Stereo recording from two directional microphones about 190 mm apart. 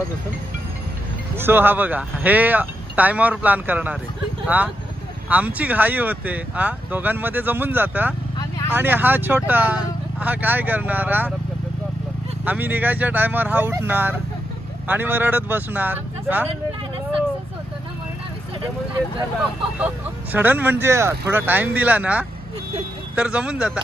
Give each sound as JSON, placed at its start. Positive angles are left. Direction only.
{"t": 1.3, "sound": "speech", "side_deg": -10}
{"t": 5.3, "sound": "speech", "side_deg": -10}
{"t": 8.4, "sound": "vehicle", "side_deg": 20}
{"t": 8.7, "sound": "speech", "side_deg": -10}
{"t": 12.4, "sound": "speech", "side_deg": -10}
{"t": 20.3, "sound": "speech", "side_deg": -10}